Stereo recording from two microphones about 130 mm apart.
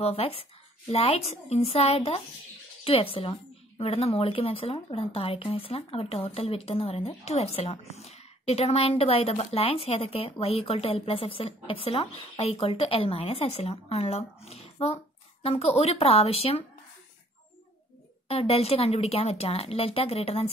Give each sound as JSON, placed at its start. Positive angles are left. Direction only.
{"t": 0.0, "sound": "speech", "side_deg": 50}
{"t": 18.3, "sound": "speech", "side_deg": 50}